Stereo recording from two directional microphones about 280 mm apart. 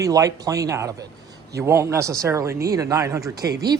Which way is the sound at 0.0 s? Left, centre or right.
Centre.